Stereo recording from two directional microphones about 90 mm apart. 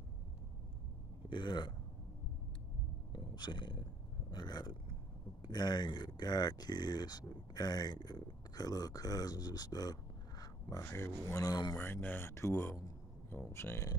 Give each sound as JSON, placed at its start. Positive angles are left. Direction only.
{"t": 1.3, "sound": "speech", "side_deg": 55}
{"t": 3.1, "sound": "a sound", "side_deg": 55}
{"t": 5.4, "sound": "speech", "side_deg": 50}
{"t": 10.8, "sound": "speech", "side_deg": 30}
{"t": 11.7, "sound": "speech", "side_deg": 20}